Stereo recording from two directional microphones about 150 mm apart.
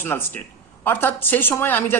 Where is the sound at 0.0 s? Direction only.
15° left (ahead or behind).